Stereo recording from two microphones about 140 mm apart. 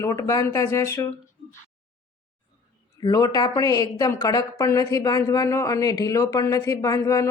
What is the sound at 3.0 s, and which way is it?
Speech, 25° left (ahead or behind).